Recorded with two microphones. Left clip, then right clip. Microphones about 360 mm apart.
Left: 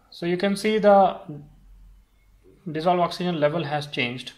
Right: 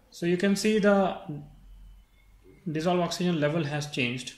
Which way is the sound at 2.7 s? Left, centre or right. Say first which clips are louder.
Left 6 dB; left.